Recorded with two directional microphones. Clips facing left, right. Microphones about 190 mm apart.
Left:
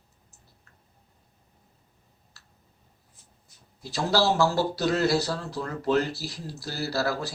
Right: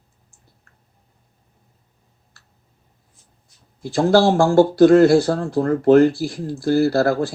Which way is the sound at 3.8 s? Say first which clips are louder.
Right 10 dB; 50° right (ahead or behind).